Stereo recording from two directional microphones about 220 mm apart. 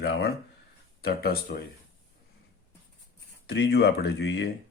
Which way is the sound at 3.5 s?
50° left (ahead or behind).